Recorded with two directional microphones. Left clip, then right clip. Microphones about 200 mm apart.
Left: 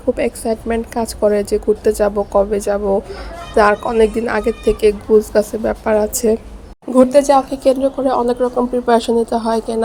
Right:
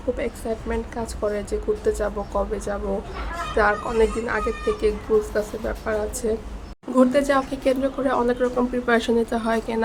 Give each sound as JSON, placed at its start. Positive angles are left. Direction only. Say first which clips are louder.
{"t": 0.2, "sound": "speech", "louder": "left 9 dB", "side_deg": 30}
{"t": 6.9, "sound": "a woman's voice", "louder": "left 8 dB", "side_deg": 20}
{"t": 8.9, "sound": "a woman's voice", "louder": "left 7 dB", "side_deg": 15}